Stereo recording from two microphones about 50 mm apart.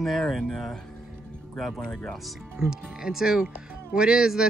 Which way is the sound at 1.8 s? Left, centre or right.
Centre.